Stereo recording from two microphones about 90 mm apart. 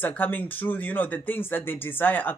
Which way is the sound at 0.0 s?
20° left (ahead or behind).